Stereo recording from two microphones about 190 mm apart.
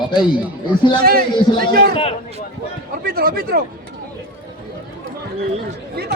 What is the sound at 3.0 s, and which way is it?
Speech, 50° right (ahead or behind).